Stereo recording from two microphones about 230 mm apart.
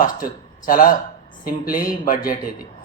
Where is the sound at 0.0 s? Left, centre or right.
Left.